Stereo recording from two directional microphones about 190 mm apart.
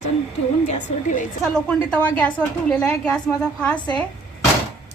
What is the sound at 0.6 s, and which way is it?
Speech, 40° left (ahead or behind).